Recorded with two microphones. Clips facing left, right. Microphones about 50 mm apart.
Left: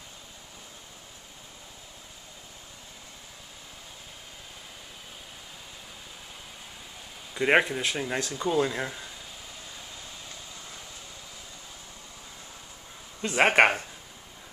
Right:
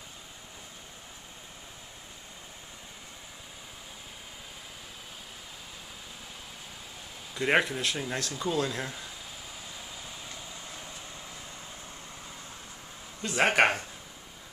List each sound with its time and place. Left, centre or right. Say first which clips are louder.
7.3 s speech: left 3 dB; centre
13.2 s speech: left 3 dB; left